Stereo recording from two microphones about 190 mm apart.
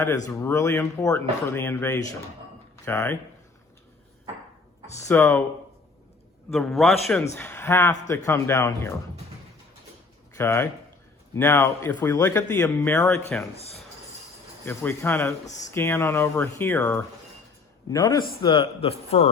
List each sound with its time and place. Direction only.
0.3 s speech: 15° left (ahead or behind)
4.9 s speech: 15° left (ahead or behind)
6.5 s a man's voice: centre (ahead or behind)
7.3 s speech: 15° left (ahead or behind)
10.3 s speech: 15° left (ahead or behind)
13.6 s a man's voice: 35° left (ahead or behind)
14.6 s speech: 10° left (ahead or behind)
18.4 s a man's voice: 25° left (ahead or behind)